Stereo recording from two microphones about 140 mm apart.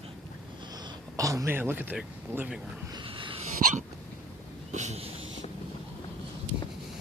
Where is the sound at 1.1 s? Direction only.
25° right (ahead or behind).